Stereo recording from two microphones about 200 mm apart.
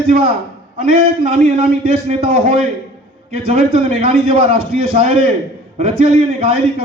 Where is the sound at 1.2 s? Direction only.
30° right (ahead or behind).